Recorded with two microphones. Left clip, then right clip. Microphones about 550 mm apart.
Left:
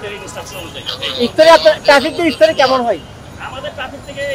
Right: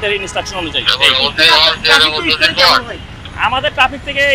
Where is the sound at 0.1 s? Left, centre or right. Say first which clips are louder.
Right 9 dB; right.